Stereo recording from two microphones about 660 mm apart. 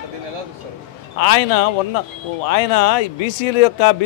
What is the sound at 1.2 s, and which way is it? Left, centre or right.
A man's voice, left.